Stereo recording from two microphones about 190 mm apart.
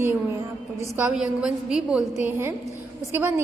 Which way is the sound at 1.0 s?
5° right (ahead or behind).